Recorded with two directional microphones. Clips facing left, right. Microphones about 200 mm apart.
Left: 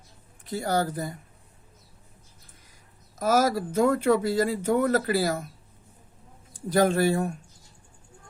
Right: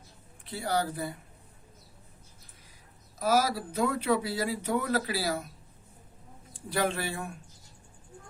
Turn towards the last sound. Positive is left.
turn(degrees=40)  # may be behind; listen again after turning